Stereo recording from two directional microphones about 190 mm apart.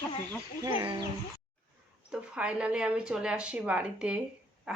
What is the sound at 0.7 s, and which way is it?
Speech, 25° right (ahead or behind).